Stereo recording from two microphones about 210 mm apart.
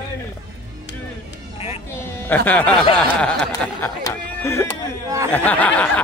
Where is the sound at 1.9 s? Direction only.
10° left (ahead or behind).